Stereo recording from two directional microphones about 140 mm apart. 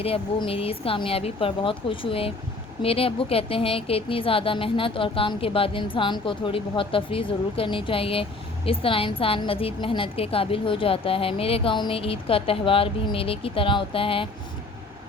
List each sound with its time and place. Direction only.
0.0 s a woman's voice: 40° left (ahead or behind)